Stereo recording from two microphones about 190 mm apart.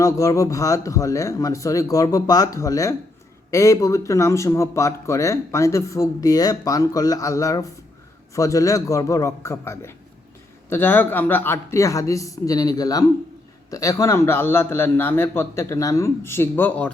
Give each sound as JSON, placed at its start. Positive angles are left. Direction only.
{"t": 0.0, "sound": "speech", "side_deg": 15}